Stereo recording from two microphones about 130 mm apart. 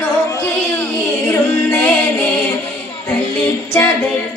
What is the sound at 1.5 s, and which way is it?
Music, 15° left (ahead or behind).